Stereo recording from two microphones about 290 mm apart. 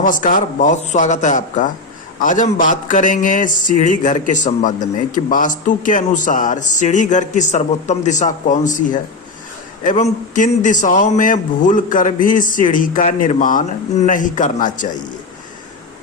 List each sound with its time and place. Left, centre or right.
0.0 s speech: left